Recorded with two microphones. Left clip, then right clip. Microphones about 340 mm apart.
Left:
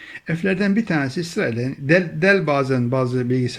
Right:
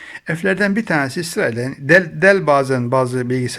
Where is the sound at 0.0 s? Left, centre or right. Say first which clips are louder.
Right 4 dB; centre.